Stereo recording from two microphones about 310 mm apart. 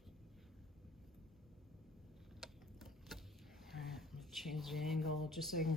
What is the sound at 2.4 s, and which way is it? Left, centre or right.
Tick-tock, centre.